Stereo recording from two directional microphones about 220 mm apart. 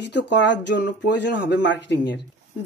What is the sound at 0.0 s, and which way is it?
Speech, 50° left (ahead or behind).